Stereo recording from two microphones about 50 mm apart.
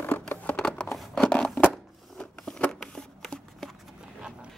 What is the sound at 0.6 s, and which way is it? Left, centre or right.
Scissors, centre.